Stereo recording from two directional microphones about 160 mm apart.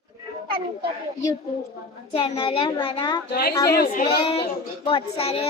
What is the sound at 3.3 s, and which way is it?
Speech, 75° left (ahead or behind).